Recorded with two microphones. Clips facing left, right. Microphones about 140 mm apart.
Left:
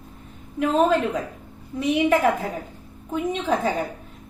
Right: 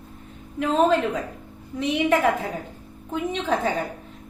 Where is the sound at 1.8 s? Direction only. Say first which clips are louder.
Left 1 dB; 10° left (ahead or behind).